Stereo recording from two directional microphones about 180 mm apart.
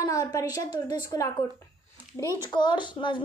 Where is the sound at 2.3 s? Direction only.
25° left (ahead or behind).